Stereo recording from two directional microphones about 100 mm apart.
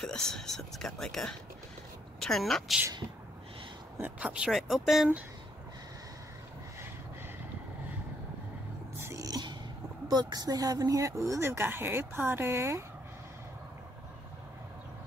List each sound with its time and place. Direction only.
0.0 s speech: 5° left (ahead or behind)
4.0 s speech: 10° right (ahead or behind)
9.0 s a sound: 35° right (ahead or behind)
10.0 s speech: 40° right (ahead or behind); by 12.8 s 25° right (ahead or behind)